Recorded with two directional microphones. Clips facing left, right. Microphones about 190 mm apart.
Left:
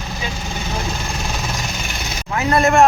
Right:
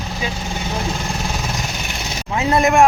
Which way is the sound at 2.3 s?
20° right (ahead or behind).